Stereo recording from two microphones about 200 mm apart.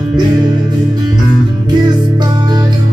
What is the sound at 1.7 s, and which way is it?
Music, 20° right (ahead or behind).